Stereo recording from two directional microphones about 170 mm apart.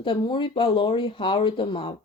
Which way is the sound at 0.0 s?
25° left (ahead or behind).